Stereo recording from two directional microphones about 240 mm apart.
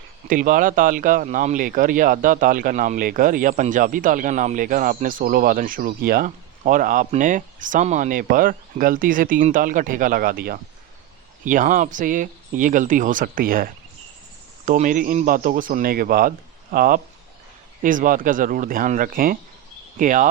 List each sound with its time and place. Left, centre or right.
0.3 s speech: right